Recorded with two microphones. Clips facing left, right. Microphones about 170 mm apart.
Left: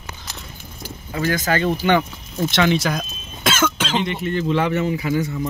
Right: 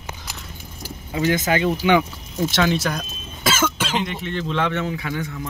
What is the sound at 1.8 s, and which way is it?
Speech, 5° right (ahead or behind).